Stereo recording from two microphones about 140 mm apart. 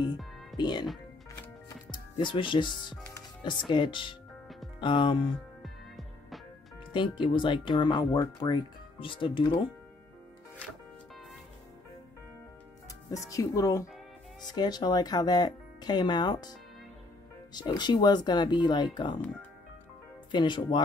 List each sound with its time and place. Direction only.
0.6 s speech: 30° left (ahead or behind)
1.9 s speech: 35° left (ahead or behind)
5.6 s music: centre (ahead or behind)
6.9 s speech: 35° left (ahead or behind)
13.1 s speech: 25° left (ahead or behind)
17.6 s speech: 30° left (ahead or behind)
20.2 s speech: 35° left (ahead or behind)